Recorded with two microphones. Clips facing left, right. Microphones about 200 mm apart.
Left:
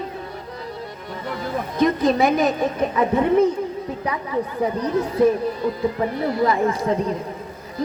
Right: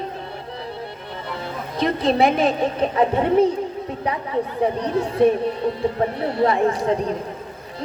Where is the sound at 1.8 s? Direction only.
30° right (ahead or behind).